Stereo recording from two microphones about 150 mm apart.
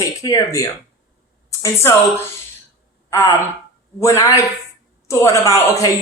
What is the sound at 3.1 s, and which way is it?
Speech, 20° left (ahead or behind).